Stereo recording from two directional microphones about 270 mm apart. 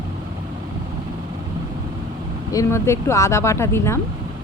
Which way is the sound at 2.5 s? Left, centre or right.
Centre.